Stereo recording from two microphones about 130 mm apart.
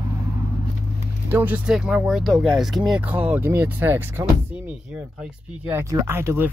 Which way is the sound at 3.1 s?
15° right (ahead or behind).